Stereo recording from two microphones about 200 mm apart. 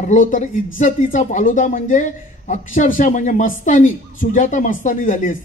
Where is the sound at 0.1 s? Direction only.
40° left (ahead or behind).